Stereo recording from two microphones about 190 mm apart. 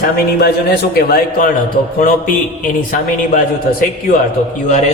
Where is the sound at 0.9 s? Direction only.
50° left (ahead or behind).